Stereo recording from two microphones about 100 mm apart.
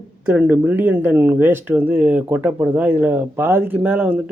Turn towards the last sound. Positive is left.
turn(degrees=-20)  # may be behind; listen again after turning